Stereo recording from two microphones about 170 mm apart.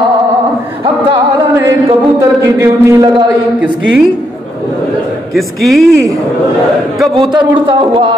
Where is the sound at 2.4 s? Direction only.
15° right (ahead or behind).